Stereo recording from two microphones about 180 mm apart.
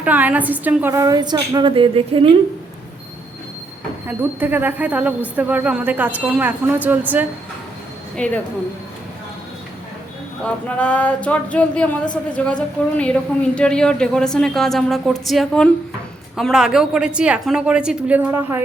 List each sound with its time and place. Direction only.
0.0 s a woman's voice: 10° right (ahead or behind); by 2.3 s 30° right (ahead or behind)
4.0 s a woman's voice: 10° right (ahead or behind)
8.1 s speech: 5° left (ahead or behind)
10.4 s a woman's voice: 5° left (ahead or behind); by 18.6 s 10° right (ahead or behind)